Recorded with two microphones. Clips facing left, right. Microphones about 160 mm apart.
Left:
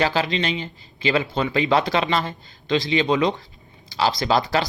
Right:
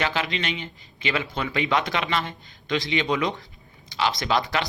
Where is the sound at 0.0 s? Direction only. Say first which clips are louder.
Left 5 dB; 35° left (ahead or behind).